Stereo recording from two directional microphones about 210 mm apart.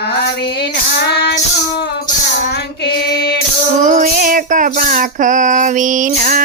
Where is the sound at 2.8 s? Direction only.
50° left (ahead or behind).